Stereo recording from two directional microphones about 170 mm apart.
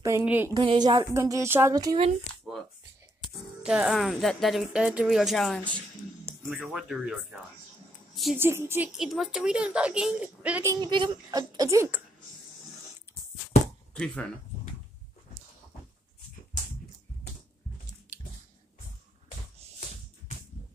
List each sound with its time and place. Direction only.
0.0 s speech: 10° right (ahead or behind)
0.6 s speech: 25° right (ahead or behind)
2.4 s a sound: 5° left (ahead or behind)
3.6 s speech: 5° right (ahead or behind)
6.2 s speech: 10° right (ahead or behind)
8.4 s a woman's voice: 15° right (ahead or behind)
10.7 s speech: 25° right (ahead or behind)
13.9 s speech: 5° left (ahead or behind)